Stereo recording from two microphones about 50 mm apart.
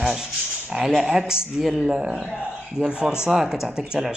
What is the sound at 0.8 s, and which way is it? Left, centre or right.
Speech, centre.